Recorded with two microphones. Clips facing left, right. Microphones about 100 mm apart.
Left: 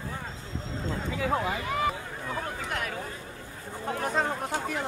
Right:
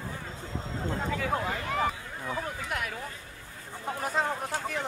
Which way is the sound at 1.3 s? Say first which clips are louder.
Left 2 dB; 5° left (ahead or behind).